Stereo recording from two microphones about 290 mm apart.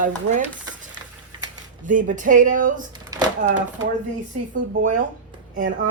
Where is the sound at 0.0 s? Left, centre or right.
Right.